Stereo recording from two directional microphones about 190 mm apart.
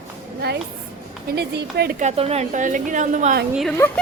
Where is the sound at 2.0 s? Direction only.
35° right (ahead or behind).